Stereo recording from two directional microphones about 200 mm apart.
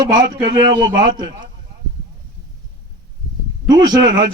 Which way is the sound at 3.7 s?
20° right (ahead or behind).